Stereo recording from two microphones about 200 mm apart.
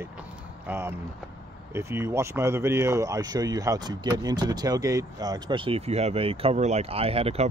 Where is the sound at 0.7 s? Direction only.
10° right (ahead or behind).